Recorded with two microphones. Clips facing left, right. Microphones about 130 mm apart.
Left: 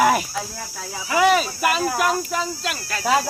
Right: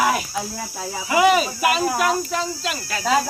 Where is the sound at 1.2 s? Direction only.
5° right (ahead or behind).